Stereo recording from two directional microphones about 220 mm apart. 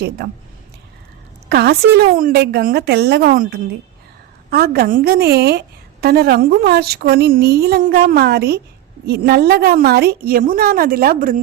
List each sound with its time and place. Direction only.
1.5 s a woman's voice: 45° right (ahead or behind)